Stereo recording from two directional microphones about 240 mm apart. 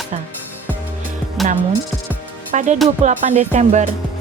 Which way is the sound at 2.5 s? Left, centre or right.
Right.